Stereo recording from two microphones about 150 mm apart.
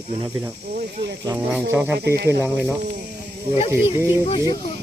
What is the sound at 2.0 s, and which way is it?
Speech, 90° right.